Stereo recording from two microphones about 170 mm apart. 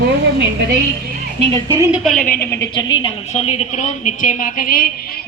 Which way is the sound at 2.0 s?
5° left (ahead or behind).